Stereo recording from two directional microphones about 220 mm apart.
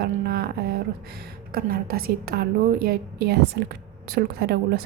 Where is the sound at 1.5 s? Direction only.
45° right (ahead or behind).